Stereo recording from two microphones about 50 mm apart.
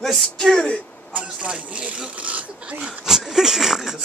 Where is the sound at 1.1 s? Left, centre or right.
Right.